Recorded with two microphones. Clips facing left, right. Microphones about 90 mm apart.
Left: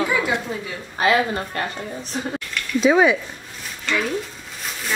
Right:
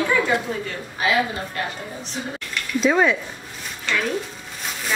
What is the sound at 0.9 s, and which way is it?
Speech, 45° left (ahead or behind).